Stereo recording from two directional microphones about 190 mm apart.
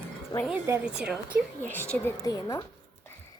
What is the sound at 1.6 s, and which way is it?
A woman's voice, 10° left (ahead or behind).